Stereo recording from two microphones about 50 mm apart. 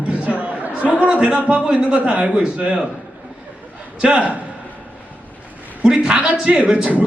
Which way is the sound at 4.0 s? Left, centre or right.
Right.